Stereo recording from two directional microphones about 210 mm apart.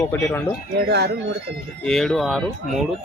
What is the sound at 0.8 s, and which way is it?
Speech, 50° right (ahead or behind).